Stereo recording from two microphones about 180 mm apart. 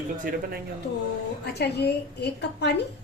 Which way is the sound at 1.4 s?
65° left (ahead or behind).